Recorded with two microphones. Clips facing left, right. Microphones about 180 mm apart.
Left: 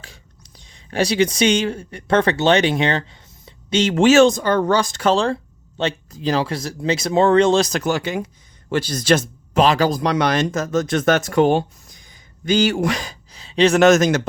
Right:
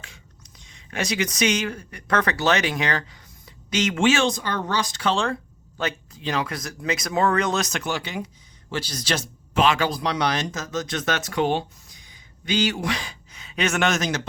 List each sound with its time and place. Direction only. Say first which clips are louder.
0.0 s speech: left 3 dB; 35° left (ahead or behind); by 9.6 s 50° left (ahead or behind)
9.6 s speech: left 5 dB; 40° left (ahead or behind)